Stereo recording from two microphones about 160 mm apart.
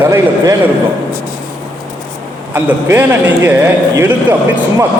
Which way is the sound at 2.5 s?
15° right (ahead or behind).